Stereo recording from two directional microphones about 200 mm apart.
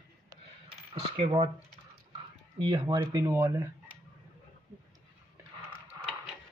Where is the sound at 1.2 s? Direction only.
30° right (ahead or behind).